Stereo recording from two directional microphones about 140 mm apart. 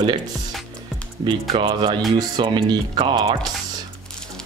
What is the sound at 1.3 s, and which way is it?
Speech, 35° right (ahead or behind).